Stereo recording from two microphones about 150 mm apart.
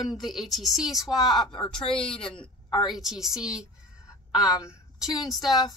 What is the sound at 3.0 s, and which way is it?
A woman's voice, centre (ahead or behind).